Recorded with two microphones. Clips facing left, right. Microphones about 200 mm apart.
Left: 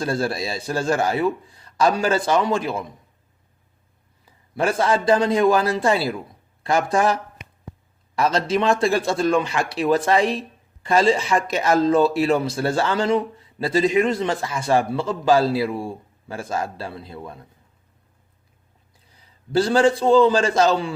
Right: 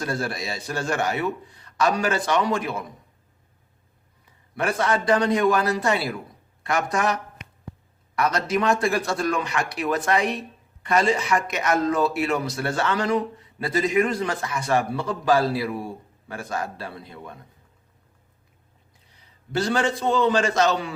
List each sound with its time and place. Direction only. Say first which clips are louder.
0.0 s a man's voice: left 5 dB; 30° left (ahead or behind)
4.5 s a man's voice: left 3 dB; 30° left (ahead or behind)
19.5 s a man's voice: left 6 dB; 30° left (ahead or behind)